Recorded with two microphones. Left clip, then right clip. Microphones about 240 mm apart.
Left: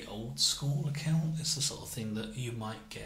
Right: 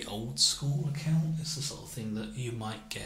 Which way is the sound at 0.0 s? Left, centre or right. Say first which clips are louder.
Right 4 dB; centre.